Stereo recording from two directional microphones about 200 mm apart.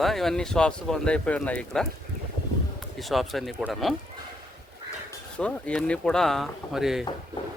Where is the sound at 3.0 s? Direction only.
Centre (ahead or behind).